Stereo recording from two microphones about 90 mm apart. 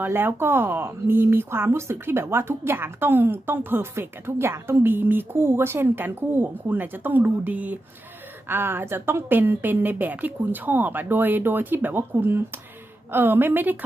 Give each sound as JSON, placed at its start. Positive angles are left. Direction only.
{"t": 0.0, "sound": "speech", "side_deg": -25}